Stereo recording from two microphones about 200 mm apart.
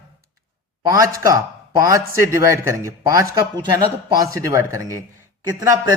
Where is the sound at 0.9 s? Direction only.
15° right (ahead or behind).